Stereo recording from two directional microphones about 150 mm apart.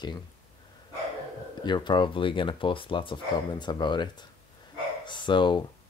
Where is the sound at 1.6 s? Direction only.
30° left (ahead or behind).